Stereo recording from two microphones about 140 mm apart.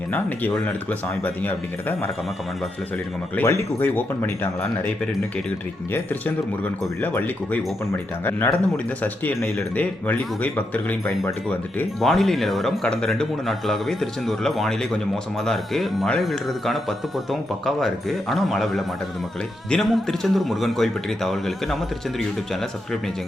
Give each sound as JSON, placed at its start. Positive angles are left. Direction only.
{"t": 0.6, "sound": "speech", "side_deg": 15}
{"t": 3.3, "sound": "speech", "side_deg": 20}
{"t": 5.9, "sound": "speech", "side_deg": 10}
{"t": 11.9, "sound": "speech", "side_deg": 0}